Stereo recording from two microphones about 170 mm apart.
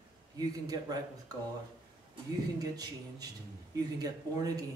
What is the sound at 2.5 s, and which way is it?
Speech, 20° right (ahead or behind).